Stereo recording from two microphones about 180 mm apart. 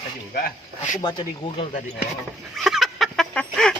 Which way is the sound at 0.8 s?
30° left (ahead or behind).